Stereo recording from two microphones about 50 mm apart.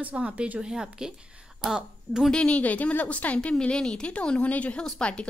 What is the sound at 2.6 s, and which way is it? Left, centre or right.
A woman's voice, left.